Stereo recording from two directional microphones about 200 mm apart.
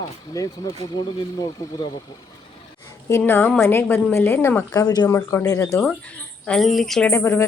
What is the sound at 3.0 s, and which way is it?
A woman's voice, 10° left (ahead or behind).